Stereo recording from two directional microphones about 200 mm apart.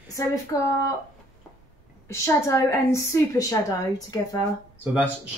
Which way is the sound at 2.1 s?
15° left (ahead or behind).